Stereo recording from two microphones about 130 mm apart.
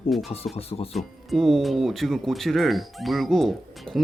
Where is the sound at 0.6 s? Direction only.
50° left (ahead or behind).